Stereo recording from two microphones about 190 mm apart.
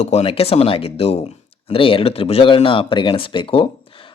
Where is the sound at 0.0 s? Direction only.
35° left (ahead or behind).